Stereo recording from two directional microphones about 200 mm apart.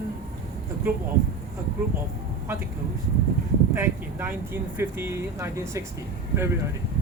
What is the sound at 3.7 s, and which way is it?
Speech, 10° right (ahead or behind).